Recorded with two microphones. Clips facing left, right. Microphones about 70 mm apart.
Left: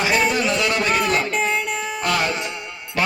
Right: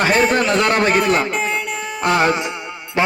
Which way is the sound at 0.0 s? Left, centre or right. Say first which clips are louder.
Right 4 dB; right.